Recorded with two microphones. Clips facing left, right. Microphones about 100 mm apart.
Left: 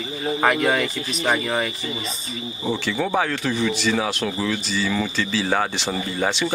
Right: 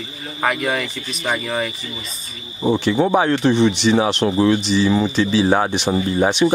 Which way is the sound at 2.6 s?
20° right (ahead or behind).